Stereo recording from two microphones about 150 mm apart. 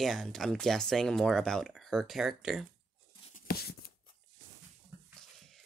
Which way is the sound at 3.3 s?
90° left.